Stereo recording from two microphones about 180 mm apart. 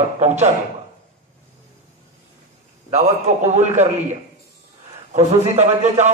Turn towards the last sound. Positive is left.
turn(degrees=-40)  # may be behind; listen again after turning